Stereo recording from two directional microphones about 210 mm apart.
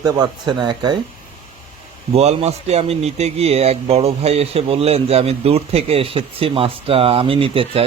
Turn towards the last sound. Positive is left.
turn(degrees=-25)  # may be behind; listen again after turning